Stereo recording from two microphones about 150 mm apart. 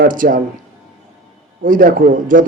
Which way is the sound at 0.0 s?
65° right (ahead or behind).